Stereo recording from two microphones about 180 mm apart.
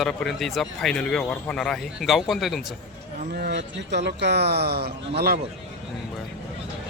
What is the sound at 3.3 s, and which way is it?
Speech, 65° right (ahead or behind).